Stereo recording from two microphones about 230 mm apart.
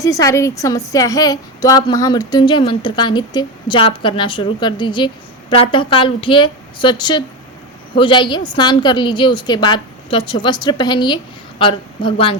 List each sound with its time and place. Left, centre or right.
0.0 s a woman's voice: centre